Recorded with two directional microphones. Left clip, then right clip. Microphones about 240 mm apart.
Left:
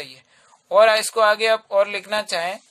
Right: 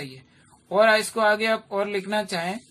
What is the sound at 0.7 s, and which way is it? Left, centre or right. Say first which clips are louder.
A man's voice: left 4 dB; left.